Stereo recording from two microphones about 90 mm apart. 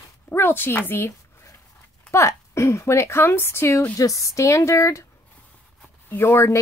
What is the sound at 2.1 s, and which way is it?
A woman's voice, 30° left (ahead or behind).